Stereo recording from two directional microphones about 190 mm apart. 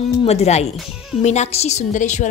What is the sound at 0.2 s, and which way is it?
A woman's voice, 35° left (ahead or behind).